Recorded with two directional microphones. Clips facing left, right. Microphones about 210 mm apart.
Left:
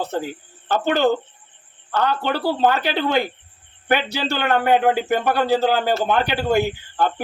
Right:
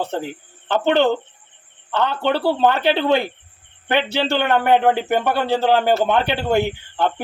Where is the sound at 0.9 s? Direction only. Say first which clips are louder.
Right 2 dB; 25° right (ahead or behind).